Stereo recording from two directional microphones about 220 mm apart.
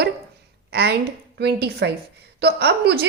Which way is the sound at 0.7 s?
50° right (ahead or behind).